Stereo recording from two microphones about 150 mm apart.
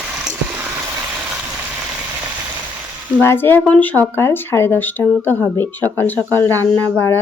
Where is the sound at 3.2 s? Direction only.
15° left (ahead or behind).